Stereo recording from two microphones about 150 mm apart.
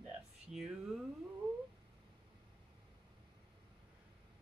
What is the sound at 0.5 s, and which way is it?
Speech, centre (ahead or behind).